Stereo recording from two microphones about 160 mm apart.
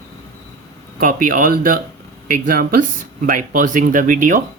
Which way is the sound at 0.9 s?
60° right (ahead or behind).